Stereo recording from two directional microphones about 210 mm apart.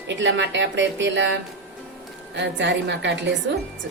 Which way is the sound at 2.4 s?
60° right (ahead or behind).